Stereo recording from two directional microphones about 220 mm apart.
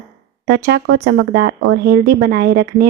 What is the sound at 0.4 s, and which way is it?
Speech, 45° right (ahead or behind).